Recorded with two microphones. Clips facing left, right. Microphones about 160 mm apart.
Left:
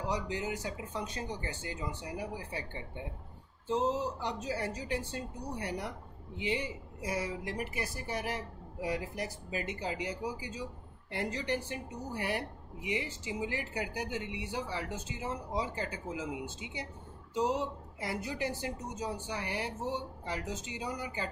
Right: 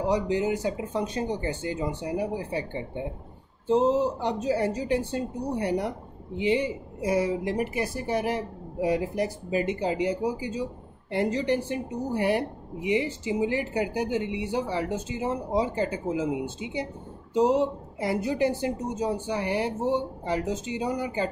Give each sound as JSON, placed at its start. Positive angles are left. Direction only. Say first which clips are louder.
{"t": 0.1, "sound": "speech", "louder": "right 10 dB", "side_deg": -20}
{"t": 4.4, "sound": "speech", "louder": "right 10 dB", "side_deg": -20}